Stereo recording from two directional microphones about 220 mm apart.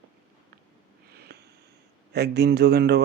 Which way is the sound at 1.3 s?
45° right (ahead or behind).